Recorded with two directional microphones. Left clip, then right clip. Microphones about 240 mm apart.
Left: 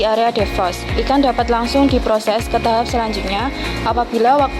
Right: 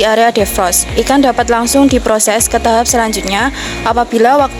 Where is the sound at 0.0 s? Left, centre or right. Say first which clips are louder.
Right 6 dB; right.